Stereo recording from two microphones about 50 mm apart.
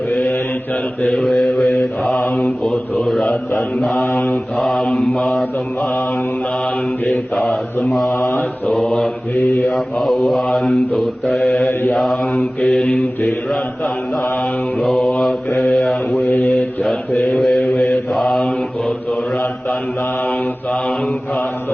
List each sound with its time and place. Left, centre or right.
1.1 s mantra: centre
3.9 s mantra: left
4.5 s mantra: centre
7.1 s mantra: centre
11.7 s mantra: left
11.9 s mantra: centre
14.8 s mantra: centre
17.2 s mantra: centre